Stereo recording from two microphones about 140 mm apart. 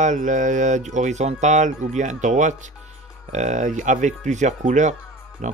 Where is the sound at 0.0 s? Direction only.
60° right (ahead or behind).